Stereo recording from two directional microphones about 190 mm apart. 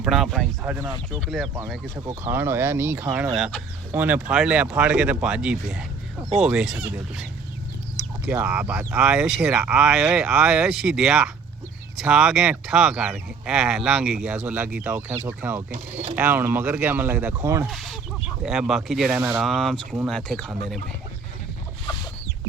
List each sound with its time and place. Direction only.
0.0 s speech: centre (ahead or behind)
0.6 s speech: 10° right (ahead or behind)
15.7 s speech: 40° right (ahead or behind)
16.1 s speech: 10° right (ahead or behind)
17.7 s speech: centre (ahead or behind)